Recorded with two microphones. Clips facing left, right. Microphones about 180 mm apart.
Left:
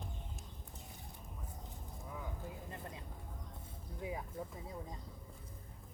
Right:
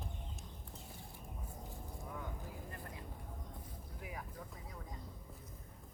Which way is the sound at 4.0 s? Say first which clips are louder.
Left 7 dB; 25° left (ahead or behind).